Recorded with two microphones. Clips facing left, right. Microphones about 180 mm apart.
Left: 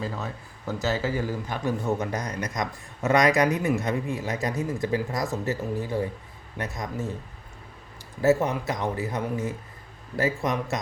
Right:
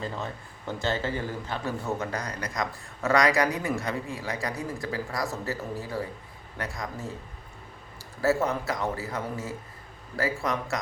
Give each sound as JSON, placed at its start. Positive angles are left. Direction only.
{"t": 0.8, "sound": "speech", "side_deg": 5}
{"t": 8.2, "sound": "speech", "side_deg": 20}